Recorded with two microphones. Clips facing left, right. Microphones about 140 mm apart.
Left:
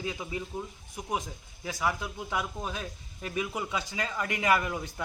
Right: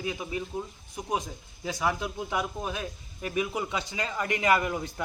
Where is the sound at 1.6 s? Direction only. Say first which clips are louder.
Right 2 dB; 20° right (ahead or behind).